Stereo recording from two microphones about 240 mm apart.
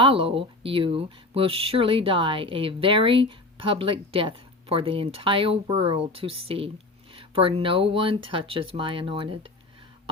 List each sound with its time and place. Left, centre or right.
0.0 s speech: right